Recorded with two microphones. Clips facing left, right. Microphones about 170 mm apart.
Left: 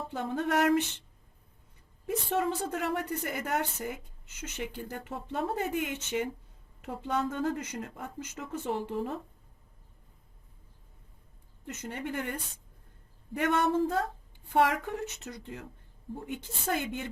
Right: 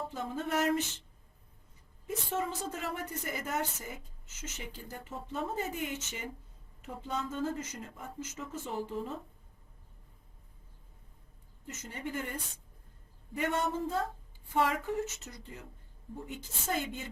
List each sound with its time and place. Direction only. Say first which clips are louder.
0.1 s a woman's voice: left 8 dB; 65° left (ahead or behind)
2.0 s a woman's voice: left 5 dB; 65° left (ahead or behind)
11.6 s a woman's voice: left 4 dB; 60° left (ahead or behind)
16.6 s a woman's voice: left 3 dB; 60° left (ahead or behind)